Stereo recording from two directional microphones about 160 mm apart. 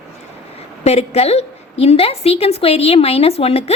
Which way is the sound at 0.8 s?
40° left (ahead or behind).